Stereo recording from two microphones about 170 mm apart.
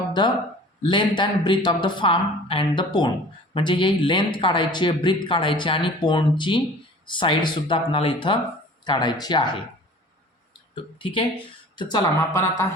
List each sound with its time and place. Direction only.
0.2 s a man's voice: 25° left (ahead or behind)
11.0 s a man's voice: 30° left (ahead or behind)